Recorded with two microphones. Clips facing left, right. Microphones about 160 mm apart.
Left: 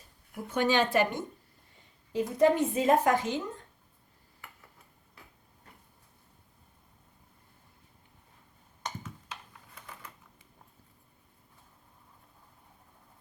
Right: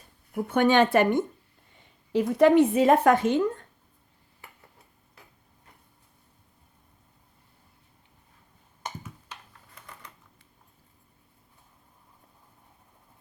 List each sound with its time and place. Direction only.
0.4 s a woman's voice: 60° right (ahead or behind)
2.1 s a woman's voice: 70° right (ahead or behind)
9.5 s a sound: 5° left (ahead or behind)